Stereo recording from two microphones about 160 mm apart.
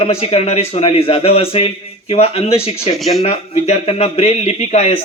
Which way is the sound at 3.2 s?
40° left (ahead or behind).